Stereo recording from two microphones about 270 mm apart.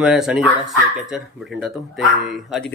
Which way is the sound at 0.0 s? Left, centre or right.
Centre.